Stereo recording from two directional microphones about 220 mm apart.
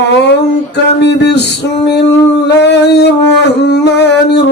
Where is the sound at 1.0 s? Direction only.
50° left (ahead or behind).